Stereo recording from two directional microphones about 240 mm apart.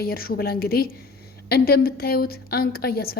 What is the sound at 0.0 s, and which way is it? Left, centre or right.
A woman's voice, left.